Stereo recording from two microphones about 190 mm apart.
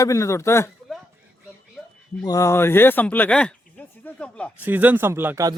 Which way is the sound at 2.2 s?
15° left (ahead or behind).